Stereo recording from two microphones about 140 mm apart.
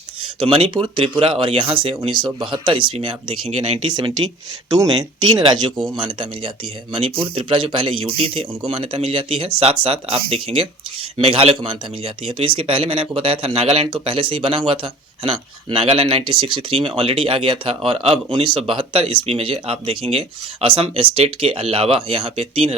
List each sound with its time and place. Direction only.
0.3 s speech: 35° right (ahead or behind)